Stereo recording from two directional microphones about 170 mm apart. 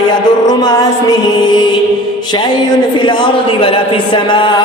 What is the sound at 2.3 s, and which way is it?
Speech, 25° left (ahead or behind).